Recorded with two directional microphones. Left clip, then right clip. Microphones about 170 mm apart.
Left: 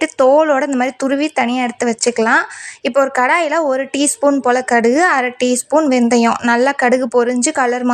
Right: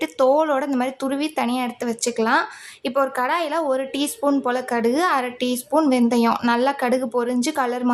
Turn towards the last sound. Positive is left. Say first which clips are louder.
# left 7 dB
turn(degrees=25)  # may be behind; listen again after turning